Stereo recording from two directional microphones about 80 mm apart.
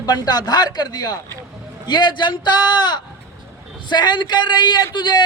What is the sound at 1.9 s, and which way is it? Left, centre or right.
A man's voice, left.